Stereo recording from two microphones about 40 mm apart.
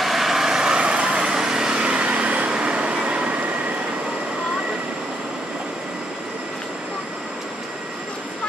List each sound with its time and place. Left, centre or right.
0.0 s vehicle: centre; by 3.3 s right